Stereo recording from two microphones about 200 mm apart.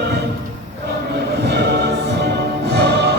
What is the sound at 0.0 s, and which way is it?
Music, 55° right (ahead or behind).